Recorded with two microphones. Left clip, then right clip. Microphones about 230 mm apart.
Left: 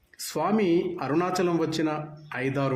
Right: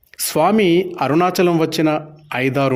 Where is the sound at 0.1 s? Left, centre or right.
Right.